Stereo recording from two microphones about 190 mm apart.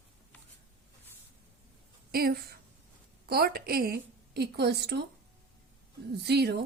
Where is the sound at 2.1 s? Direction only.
50° right (ahead or behind).